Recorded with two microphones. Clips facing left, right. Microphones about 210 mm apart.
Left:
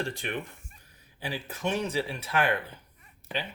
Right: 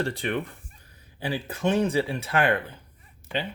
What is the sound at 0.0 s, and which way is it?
Speech, 65° right (ahead or behind).